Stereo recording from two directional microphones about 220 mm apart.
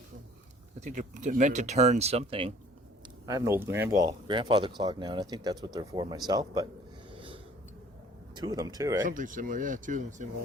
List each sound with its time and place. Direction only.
0.8 s speech: 35° right (ahead or behind)
3.2 s speech: 15° right (ahead or behind)
7.1 s a sound: 25° right (ahead or behind)
8.4 s speech: 15° right (ahead or behind)
9.0 s speech: 35° right (ahead or behind)